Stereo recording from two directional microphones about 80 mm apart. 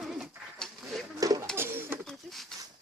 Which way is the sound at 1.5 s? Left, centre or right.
Right.